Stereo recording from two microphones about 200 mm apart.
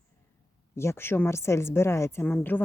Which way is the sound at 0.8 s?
10° left (ahead or behind).